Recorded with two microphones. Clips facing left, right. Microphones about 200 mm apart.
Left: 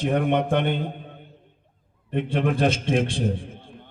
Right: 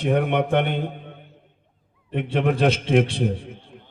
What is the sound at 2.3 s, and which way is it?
Speech, 60° right (ahead or behind).